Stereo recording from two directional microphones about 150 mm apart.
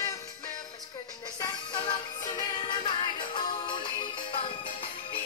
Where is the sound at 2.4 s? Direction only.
30° left (ahead or behind).